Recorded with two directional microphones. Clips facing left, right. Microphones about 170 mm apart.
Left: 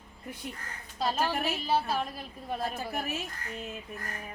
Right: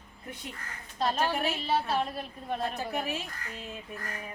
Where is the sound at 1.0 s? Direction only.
5° left (ahead or behind).